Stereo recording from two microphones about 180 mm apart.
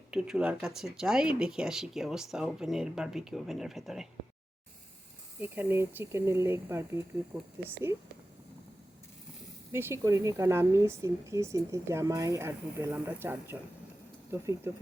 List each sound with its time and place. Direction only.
0.1 s speech: 5° right (ahead or behind)
5.4 s speech: 10° right (ahead or behind)
9.7 s speech: 15° right (ahead or behind)